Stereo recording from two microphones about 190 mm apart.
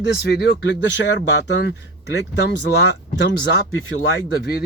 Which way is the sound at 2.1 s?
60° left (ahead or behind).